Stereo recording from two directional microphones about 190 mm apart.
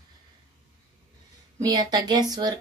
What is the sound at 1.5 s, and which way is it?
Speech, 20° right (ahead or behind).